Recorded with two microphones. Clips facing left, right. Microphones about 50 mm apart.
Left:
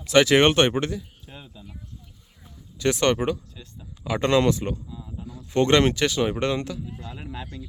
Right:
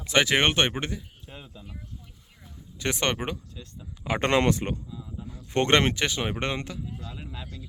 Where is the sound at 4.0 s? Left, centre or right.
Right.